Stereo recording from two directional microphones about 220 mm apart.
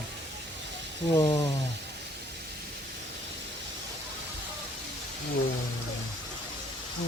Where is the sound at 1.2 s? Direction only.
15° left (ahead or behind).